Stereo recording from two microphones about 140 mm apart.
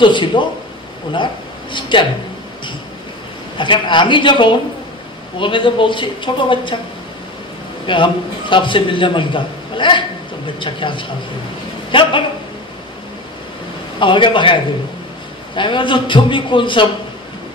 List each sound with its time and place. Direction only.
0.0 s speech: 35° left (ahead or behind)
3.5 s speech: 35° left (ahead or behind)
7.8 s a man's voice: 35° left (ahead or behind)
13.9 s speech: 35° left (ahead or behind)